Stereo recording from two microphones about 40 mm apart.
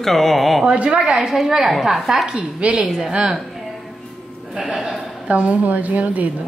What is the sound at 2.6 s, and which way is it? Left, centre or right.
Speech, right.